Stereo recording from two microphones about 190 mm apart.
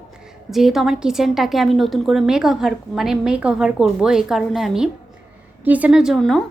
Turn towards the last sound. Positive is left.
turn(degrees=0)  # may be behind; listen again after turning